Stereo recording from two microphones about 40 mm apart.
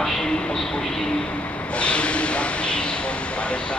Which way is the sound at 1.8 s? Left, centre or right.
Left.